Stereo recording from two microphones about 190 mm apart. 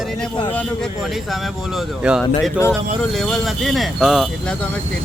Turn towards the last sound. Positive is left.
turn(degrees=0)  # may be behind; listen again after turning